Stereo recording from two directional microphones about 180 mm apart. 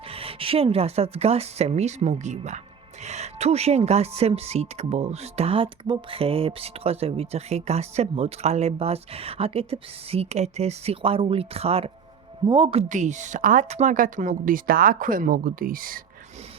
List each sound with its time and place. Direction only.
0.1 s speech: 30° right (ahead or behind)
12.9 s speech: 40° right (ahead or behind)